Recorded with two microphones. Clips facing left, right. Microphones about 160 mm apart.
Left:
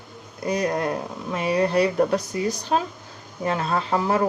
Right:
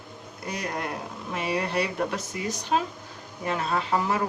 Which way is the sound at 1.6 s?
40° left (ahead or behind).